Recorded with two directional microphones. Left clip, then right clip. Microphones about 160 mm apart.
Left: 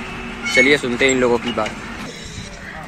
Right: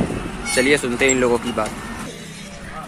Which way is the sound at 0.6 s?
5° left (ahead or behind).